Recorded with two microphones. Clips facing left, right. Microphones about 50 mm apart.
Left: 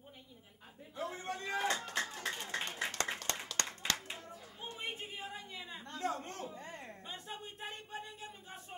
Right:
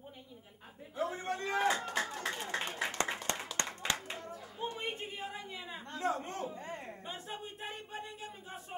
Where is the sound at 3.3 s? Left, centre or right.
Right.